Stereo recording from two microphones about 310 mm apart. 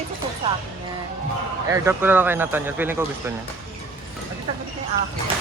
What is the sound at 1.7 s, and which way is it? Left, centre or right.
Speech, centre.